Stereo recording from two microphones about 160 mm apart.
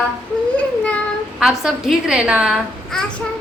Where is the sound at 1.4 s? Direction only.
Centre (ahead or behind).